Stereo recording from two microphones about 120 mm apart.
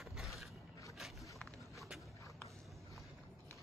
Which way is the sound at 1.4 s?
Centre (ahead or behind).